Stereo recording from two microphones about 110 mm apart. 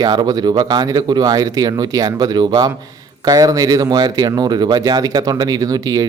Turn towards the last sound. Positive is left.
turn(degrees=-35)  # may be behind; listen again after turning